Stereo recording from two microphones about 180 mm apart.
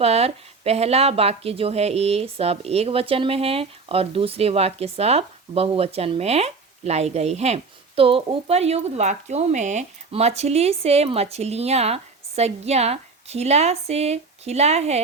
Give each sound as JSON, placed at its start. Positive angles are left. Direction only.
{"t": 0.0, "sound": "speech", "side_deg": -35}